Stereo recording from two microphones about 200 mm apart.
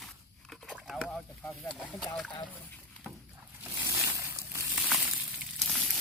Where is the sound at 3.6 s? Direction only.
15° right (ahead or behind).